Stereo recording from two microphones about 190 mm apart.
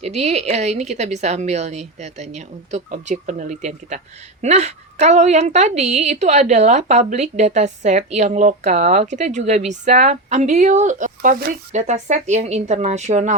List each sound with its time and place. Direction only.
0.0 s a woman's voice: 35° right (ahead or behind)